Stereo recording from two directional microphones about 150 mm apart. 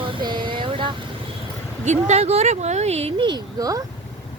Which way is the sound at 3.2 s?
25° right (ahead or behind).